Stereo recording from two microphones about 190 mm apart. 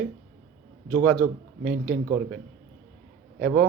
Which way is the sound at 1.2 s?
50° right (ahead or behind).